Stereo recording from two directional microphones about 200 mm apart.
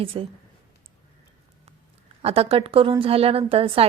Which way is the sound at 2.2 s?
30° right (ahead or behind).